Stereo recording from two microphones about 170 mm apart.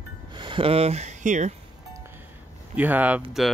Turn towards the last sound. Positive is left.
turn(degrees=-10)  # may be behind; listen again after turning